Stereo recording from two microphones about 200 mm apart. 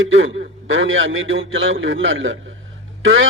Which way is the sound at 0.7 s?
75° right (ahead or behind).